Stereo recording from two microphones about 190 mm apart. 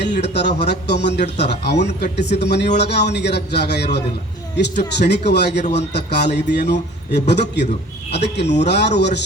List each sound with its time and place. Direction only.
0.0 s a man's voice: 60° left (ahead or behind)